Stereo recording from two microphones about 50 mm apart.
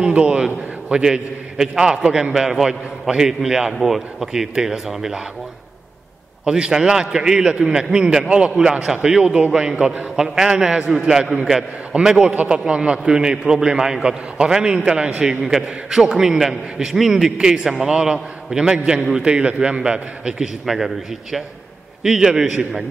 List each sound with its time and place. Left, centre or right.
0.1 s a man's voice: right
0.9 s a man's voice: centre
6.4 s a man's voice: centre
10.2 s a man's voice: centre
20.6 s a man's voice: centre